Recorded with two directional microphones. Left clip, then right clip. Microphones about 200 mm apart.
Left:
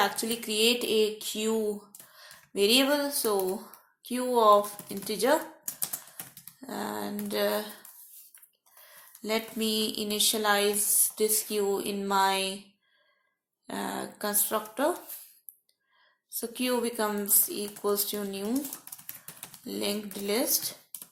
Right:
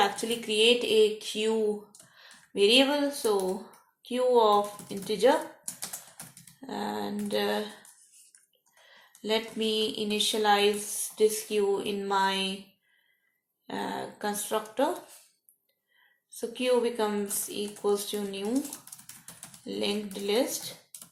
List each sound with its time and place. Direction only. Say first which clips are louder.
0.4 s speech: right 3 dB; 40° left (ahead or behind)
6.3 s a sound: left 1 dB; centre (ahead or behind)
6.7 s speech: right 1 dB; 45° left (ahead or behind)
9.2 s speech: right 2 dB; 40° left (ahead or behind)
13.7 s speech: right 1 dB; 45° left (ahead or behind)
16.4 s speech: right 4 dB; 45° left (ahead or behind)
18.4 s typing: right 1 dB; centre (ahead or behind)
19.6 s speech: right 1 dB; 45° left (ahead or behind)
20.7 s a sound: even; centre (ahead or behind)